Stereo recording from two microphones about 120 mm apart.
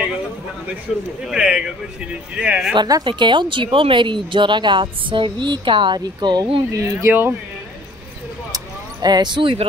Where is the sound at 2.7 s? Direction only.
40° right (ahead or behind).